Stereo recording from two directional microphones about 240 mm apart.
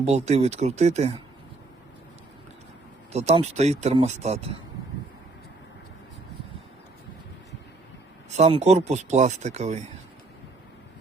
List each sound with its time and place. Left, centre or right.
0.0 s speech: right
3.1 s speech: right
8.4 s speech: right